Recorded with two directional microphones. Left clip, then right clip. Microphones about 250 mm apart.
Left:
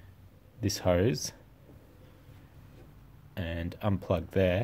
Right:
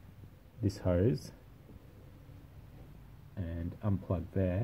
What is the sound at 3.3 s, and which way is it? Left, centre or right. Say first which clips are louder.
Speech: left 7 dB; left.